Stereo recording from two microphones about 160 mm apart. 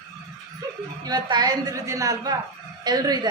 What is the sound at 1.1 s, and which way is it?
A woman's voice, 25° right (ahead or behind).